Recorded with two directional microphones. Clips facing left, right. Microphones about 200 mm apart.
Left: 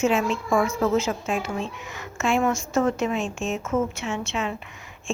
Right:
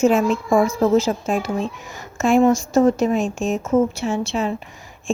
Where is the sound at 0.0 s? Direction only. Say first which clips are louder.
Right 6 dB; 40° right (ahead or behind).